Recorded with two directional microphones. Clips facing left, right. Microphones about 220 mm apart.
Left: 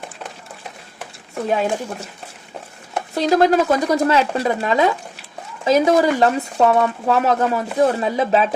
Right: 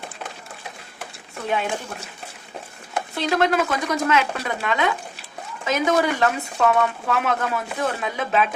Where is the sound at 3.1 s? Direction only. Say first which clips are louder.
Left 6 dB; 40° left (ahead or behind).